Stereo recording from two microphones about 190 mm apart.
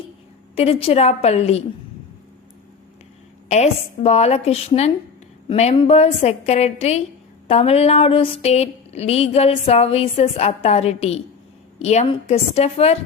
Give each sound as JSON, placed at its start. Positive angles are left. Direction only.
{"t": 0.5, "sound": "speech", "side_deg": 30}
{"t": 3.5, "sound": "speech", "side_deg": 35}